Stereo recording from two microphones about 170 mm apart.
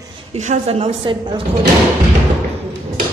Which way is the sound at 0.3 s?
40° right (ahead or behind).